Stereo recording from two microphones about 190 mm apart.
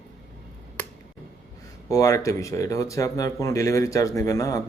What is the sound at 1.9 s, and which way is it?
Speech, 15° left (ahead or behind).